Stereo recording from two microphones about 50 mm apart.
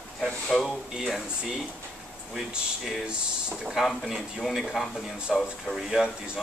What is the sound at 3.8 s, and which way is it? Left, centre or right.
Speech, centre.